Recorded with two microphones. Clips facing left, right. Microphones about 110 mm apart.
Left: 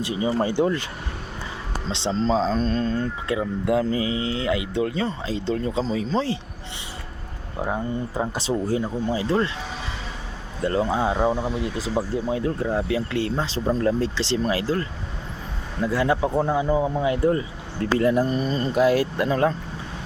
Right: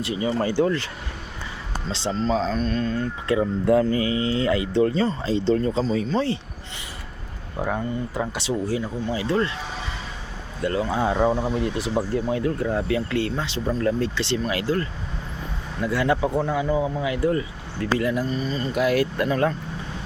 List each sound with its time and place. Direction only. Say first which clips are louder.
0.0 s speech: left 1 dB; 20° left (ahead or behind)
1.9 s speech: left 1 dB; 25° left (ahead or behind)
3.2 s speech: right 5 dB; 10° left (ahead or behind)
8.1 s speech: left 3 dB; 40° left (ahead or behind)
10.6 s speech: left 2 dB; 30° left (ahead or behind)
10.8 s speech: even; 15° left (ahead or behind)
11.3 s speech: right 1 dB; centre (ahead or behind)
11.6 s speech: right 1 dB; 15° left (ahead or behind)
16.7 s speech: left 2 dB; 30° left (ahead or behind); by 18.7 s 45° left (ahead or behind)
18.7 s speech: left 2 dB; 30° left (ahead or behind)